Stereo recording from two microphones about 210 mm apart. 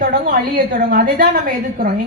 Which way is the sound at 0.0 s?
40° right (ahead or behind).